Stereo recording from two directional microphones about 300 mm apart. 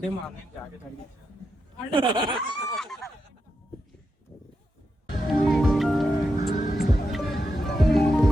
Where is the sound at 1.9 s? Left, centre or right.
Centre.